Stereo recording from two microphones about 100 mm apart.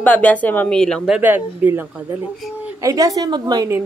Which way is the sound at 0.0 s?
15° left (ahead or behind).